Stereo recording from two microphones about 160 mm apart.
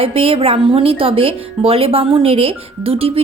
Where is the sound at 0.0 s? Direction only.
35° right (ahead or behind).